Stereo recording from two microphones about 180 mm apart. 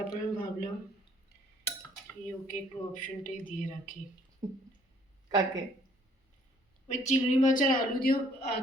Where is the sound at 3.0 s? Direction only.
45° left (ahead or behind).